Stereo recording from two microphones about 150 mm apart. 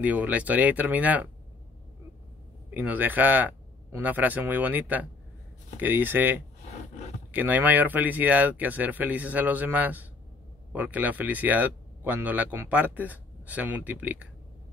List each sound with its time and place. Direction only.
0.0 s speech: 10° right (ahead or behind)
2.7 s speech: 10° right (ahead or behind)
6.7 s scrape: 50° left (ahead or behind)
7.3 s speech: 10° right (ahead or behind)